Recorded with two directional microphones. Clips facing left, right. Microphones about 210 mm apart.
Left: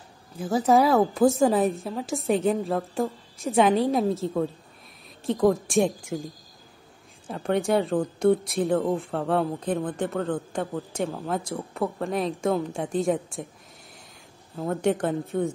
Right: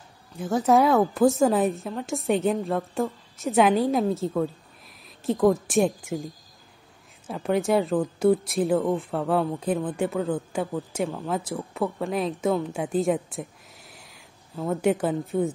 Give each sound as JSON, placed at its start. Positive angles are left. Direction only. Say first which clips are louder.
{"t": 0.4, "sound": "speech", "louder": "even", "side_deg": 0}
{"t": 14.5, "sound": "speech", "louder": "right 1 dB", "side_deg": 0}